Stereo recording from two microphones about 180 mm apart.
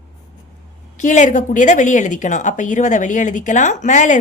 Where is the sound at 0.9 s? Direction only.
45° left (ahead or behind).